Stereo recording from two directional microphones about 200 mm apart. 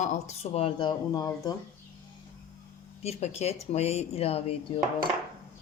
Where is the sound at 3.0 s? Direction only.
30° left (ahead or behind).